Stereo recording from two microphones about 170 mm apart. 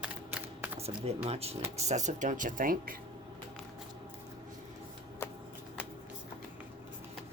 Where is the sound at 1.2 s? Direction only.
35° right (ahead or behind); by 2.9 s 55° right (ahead or behind).